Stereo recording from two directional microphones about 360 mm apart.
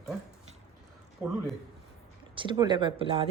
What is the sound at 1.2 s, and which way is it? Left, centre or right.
Speech, centre.